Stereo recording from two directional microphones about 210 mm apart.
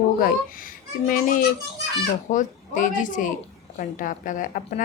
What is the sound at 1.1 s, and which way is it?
A woman's voice, 40° left (ahead or behind).